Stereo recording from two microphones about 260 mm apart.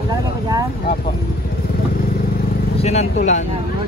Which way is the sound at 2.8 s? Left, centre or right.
Left.